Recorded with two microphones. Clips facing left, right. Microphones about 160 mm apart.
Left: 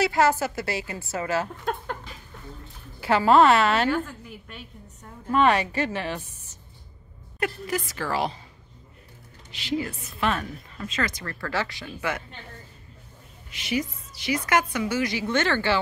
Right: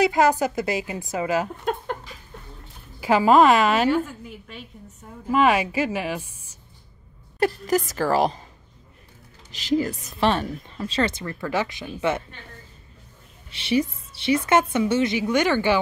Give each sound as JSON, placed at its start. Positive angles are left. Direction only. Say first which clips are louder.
{"t": 0.0, "sound": "a woman's voice", "louder": "right 3 dB", "side_deg": -15}
{"t": 3.0, "sound": "a woman's voice", "louder": "right 2 dB", "side_deg": -15}
{"t": 5.2, "sound": "a woman's voice", "louder": "right 2 dB", "side_deg": -10}
{"t": 7.3, "sound": "a woman's voice", "louder": "right 7 dB", "side_deg": -35}
{"t": 9.5, "sound": "a woman's voice", "louder": "right 6 dB", "side_deg": -40}
{"t": 11.2, "sound": "a woman's voice", "louder": "right 4 dB", "side_deg": -15}
{"t": 13.5, "sound": "a woman's voice", "louder": "right 5 dB", "side_deg": -30}
{"t": 15.2, "sound": "a woman's voice", "louder": "right 4 dB", "side_deg": -15}